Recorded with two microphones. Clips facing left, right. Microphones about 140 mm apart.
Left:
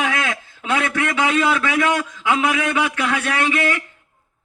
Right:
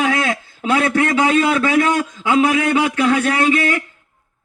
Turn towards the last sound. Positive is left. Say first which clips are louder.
# right 4 dB
turn(degrees=-35)  # may be behind; listen again after turning